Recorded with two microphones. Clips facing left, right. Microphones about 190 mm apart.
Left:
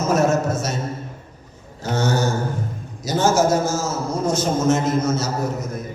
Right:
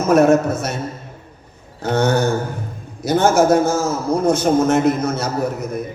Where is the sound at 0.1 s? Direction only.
60° right (ahead or behind).